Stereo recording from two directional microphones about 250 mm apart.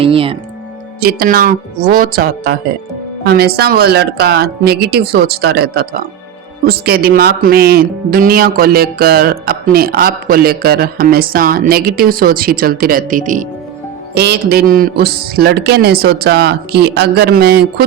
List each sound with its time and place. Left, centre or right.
0.0 s music: right
1.0 s speech: right